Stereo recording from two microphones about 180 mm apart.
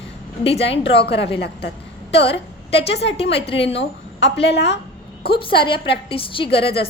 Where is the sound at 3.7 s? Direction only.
80° left.